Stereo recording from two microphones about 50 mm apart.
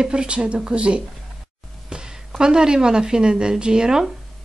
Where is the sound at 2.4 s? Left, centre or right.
Centre.